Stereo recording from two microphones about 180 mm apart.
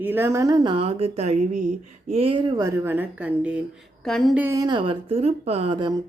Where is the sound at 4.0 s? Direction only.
5° left (ahead or behind).